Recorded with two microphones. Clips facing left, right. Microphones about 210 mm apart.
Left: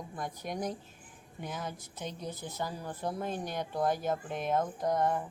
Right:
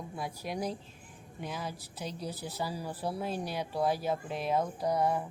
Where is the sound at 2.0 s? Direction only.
35° right (ahead or behind).